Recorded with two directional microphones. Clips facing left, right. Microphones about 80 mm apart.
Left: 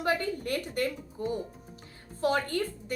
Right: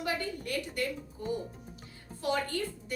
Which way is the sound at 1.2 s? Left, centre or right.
Left.